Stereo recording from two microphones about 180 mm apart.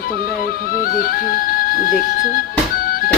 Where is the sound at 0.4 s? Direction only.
55° left (ahead or behind).